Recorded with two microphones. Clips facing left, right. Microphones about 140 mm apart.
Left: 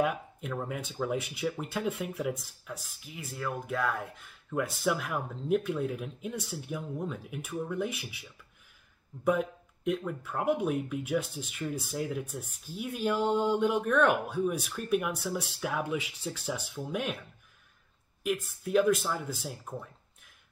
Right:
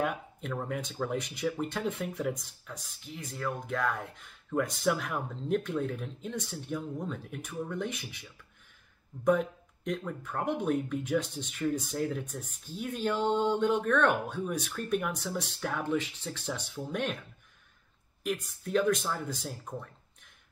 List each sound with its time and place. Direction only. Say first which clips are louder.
0.0 s speech: left 3 dB; centre (ahead or behind)
18.2 s speech: left 2 dB; 5° left (ahead or behind)